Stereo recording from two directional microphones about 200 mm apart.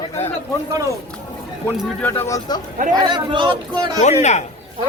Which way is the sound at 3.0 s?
20° right (ahead or behind).